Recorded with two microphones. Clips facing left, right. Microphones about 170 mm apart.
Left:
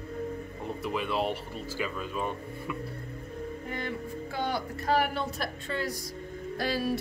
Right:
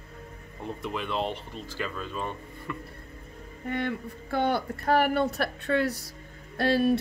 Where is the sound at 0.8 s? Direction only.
5° left (ahead or behind).